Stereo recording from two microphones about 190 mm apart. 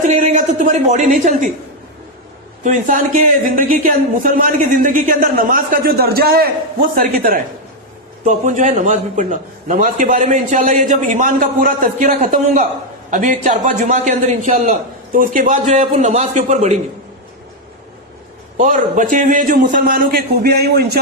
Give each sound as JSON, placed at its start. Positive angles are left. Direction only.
{"t": 0.1, "sound": "speech", "side_deg": -40}
{"t": 2.6, "sound": "a man's voice", "side_deg": -45}
{"t": 18.5, "sound": "speech", "side_deg": -45}